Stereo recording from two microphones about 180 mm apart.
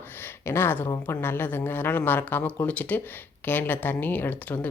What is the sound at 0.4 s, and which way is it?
Speech, 15° left (ahead or behind).